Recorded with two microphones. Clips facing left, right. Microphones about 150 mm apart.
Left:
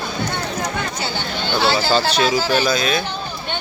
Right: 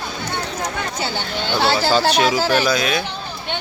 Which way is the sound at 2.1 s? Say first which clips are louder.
Right 1 dB; 10° right (ahead or behind).